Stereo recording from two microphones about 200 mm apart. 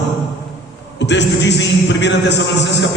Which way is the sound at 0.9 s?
60° left (ahead or behind).